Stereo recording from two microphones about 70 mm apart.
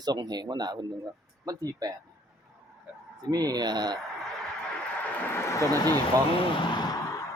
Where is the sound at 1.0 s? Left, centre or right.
Right.